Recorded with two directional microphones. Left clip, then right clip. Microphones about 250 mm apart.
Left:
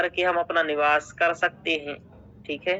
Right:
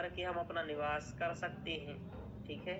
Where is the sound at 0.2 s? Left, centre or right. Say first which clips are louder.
Left 17 dB; left.